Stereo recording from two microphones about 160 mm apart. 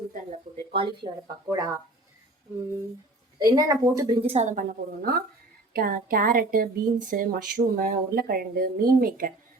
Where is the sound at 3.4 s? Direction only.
25° right (ahead or behind).